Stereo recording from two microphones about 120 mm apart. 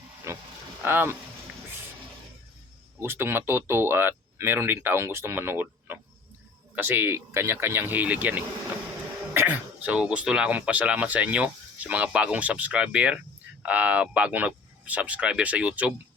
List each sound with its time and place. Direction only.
0.8 s speech: 15° right (ahead or behind)
3.0 s speech: 20° right (ahead or behind)